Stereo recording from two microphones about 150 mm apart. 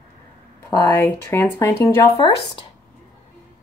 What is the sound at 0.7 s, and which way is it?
Speech, 15° left (ahead or behind).